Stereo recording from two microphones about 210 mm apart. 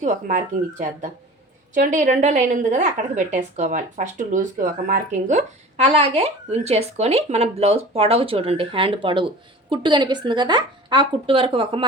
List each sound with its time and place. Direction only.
0.0 s a woman's voice: 35° right (ahead or behind)